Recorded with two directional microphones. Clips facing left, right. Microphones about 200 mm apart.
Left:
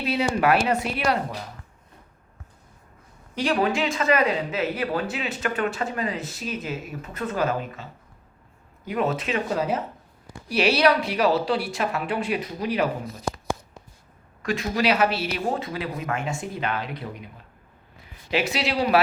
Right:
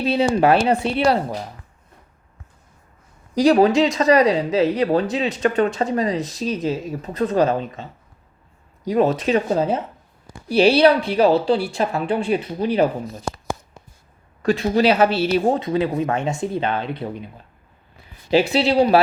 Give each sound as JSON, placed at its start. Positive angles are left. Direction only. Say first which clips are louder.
{"t": 0.0, "sound": "speech", "louder": "right 6 dB", "side_deg": -30}
{"t": 3.3, "sound": "speech", "louder": "right 9 dB", "side_deg": -40}
{"t": 14.4, "sound": "speech", "louder": "right 7 dB", "side_deg": -30}
{"t": 18.3, "sound": "speech", "louder": "right 8 dB", "side_deg": -30}